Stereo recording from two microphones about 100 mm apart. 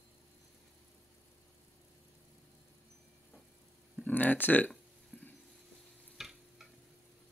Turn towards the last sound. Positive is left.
turn(degrees=-5)  # may be behind; listen again after turning